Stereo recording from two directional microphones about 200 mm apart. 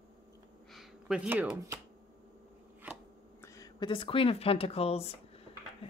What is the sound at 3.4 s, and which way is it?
Speech, 15° left (ahead or behind).